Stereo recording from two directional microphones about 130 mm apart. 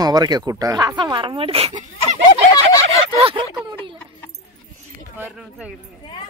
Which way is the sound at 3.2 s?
45° right (ahead or behind).